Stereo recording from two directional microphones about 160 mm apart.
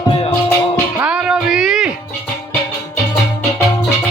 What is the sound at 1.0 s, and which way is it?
Music, 5° right (ahead or behind).